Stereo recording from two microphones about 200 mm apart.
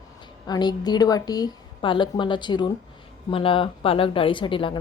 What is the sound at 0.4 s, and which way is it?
A woman's voice, 20° left (ahead or behind).